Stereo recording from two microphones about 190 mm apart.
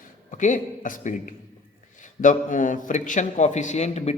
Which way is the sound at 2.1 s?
45° left (ahead or behind).